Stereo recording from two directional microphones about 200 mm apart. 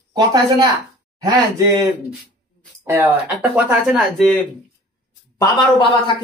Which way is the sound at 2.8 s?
10° right (ahead or behind).